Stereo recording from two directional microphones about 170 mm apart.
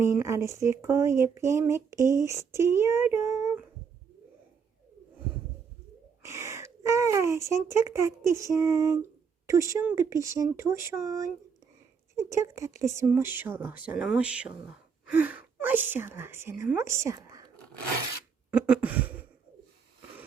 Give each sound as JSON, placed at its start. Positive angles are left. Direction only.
{"t": 0.0, "sound": "speech", "side_deg": -15}
{"t": 6.2, "sound": "speech", "side_deg": -15}
{"t": 12.3, "sound": "speech", "side_deg": -20}
{"t": 18.5, "sound": "a sound", "side_deg": -10}